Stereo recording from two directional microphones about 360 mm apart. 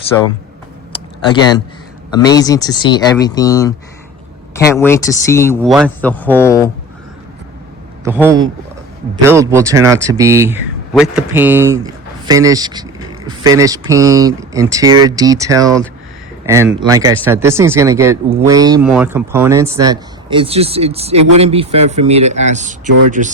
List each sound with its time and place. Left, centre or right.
0.9 s a sound: centre
2.1 s speech: centre
8.0 s speech: centre
22.9 s speech: right